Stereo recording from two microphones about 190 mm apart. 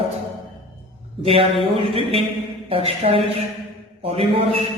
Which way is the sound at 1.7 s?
30° right (ahead or behind).